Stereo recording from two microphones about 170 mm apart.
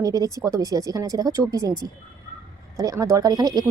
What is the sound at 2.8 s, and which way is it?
Speech, 20° right (ahead or behind).